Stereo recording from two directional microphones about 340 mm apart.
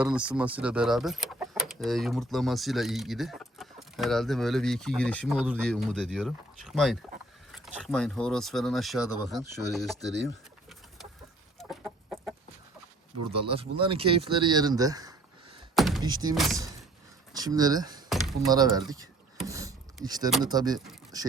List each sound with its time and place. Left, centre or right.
0.0 s speech: centre
11.7 s chicken: centre
13.5 s speech: centre
15.7 s thunk: centre
16.0 s speech: centre
16.3 s speech: centre
19.4 s a sound: centre
20.4 s speech: centre